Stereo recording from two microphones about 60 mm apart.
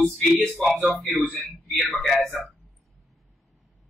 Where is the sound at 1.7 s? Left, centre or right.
Centre.